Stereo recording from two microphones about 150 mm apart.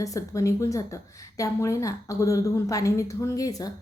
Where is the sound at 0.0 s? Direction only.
20° left (ahead or behind).